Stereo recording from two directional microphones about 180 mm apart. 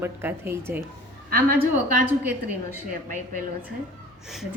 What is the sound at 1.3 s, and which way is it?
Speech, 55° right (ahead or behind).